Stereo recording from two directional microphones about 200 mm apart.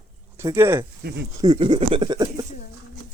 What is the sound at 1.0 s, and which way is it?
Speech, 55° right (ahead or behind).